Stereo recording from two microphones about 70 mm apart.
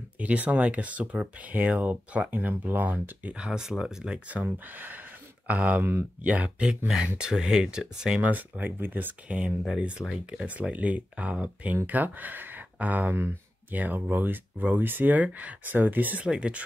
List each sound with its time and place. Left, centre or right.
0.2 s speech: centre
3.3 s speech: centre
8.3 s speech: right
9.4 s speech: centre
10.4 s speech: centre